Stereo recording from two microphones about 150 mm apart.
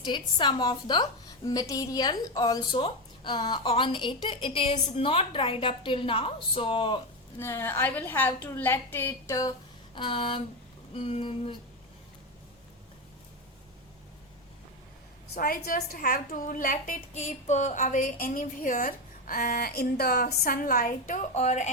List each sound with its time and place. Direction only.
0.0 s a woman's voice: 30° left (ahead or behind)
7.3 s a woman's voice: 15° left (ahead or behind)
9.9 s a woman's voice: 35° left (ahead or behind)
15.4 s a woman's voice: 75° left (ahead or behind); by 20.3 s 90° left
20.4 s a woman's voice: 75° left (ahead or behind); by 21.7 s 50° left (ahead or behind)